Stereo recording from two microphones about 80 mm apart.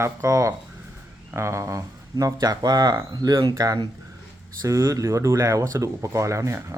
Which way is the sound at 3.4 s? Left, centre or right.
Right.